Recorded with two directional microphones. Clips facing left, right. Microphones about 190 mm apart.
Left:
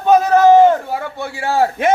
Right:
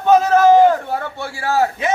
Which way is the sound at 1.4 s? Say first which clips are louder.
Left 1 dB; 30° left (ahead or behind).